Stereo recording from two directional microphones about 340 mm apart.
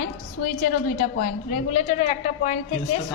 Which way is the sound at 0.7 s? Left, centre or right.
Left.